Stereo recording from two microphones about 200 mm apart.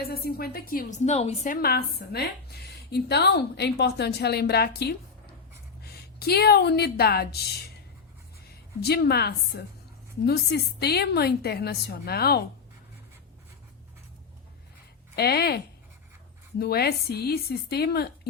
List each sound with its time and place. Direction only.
0.1 s a woman's voice: 50° left (ahead or behind); by 1.5 s 35° left (ahead or behind)
1.6 s a woman's voice: 50° left (ahead or behind)
8.8 s a woman's voice: 55° left (ahead or behind)
15.1 s a woman's voice: 55° left (ahead or behind)